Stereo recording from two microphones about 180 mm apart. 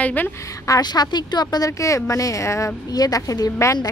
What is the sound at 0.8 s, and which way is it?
Speech, 25° left (ahead or behind).